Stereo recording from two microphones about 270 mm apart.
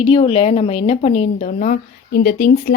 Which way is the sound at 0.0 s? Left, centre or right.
Centre.